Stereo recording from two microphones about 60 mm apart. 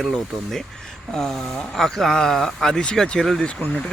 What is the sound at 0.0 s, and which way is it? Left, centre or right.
Speech, centre.